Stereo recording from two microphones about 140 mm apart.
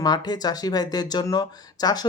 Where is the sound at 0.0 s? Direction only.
30° left (ahead or behind).